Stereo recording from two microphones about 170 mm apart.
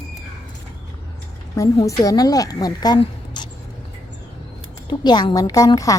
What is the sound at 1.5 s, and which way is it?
A woman's voice, 20° left (ahead or behind).